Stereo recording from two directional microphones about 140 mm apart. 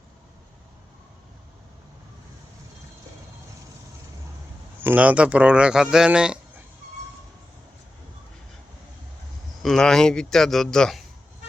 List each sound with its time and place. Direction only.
4.8 s speech: 10° right (ahead or behind)
9.6 s speech: 5° left (ahead or behind)